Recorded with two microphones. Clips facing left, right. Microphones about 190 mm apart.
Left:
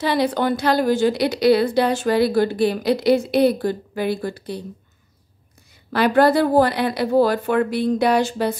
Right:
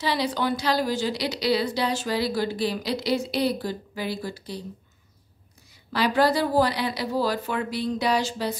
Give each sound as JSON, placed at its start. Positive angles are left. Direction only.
{"t": 0.0, "sound": "a woman's voice", "side_deg": 55}
{"t": 5.9, "sound": "a woman's voice", "side_deg": 55}